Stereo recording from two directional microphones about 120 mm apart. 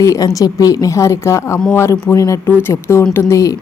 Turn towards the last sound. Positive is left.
turn(degrees=30)  # may be behind; listen again after turning